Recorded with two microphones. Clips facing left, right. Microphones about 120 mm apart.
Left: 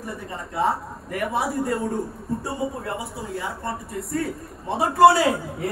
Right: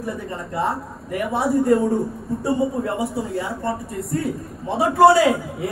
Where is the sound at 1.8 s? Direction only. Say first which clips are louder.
Right 6 dB; 15° right (ahead or behind).